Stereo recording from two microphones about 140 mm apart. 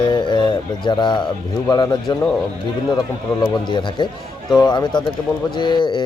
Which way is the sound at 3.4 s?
35° left (ahead or behind).